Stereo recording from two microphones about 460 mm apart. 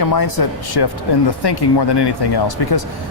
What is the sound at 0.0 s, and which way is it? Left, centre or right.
Speech, left.